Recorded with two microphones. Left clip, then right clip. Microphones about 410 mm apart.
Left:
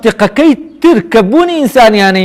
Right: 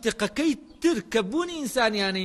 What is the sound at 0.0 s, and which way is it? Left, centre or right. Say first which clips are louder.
A man's voice: left 18 dB; left.